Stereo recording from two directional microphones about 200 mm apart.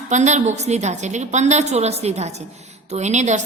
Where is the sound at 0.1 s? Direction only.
35° right (ahead or behind).